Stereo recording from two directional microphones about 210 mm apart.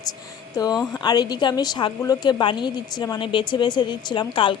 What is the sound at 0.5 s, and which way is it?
A woman's voice, 20° left (ahead or behind).